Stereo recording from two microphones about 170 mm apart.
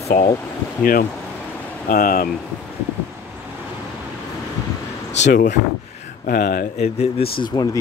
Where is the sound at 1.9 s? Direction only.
55° left (ahead or behind).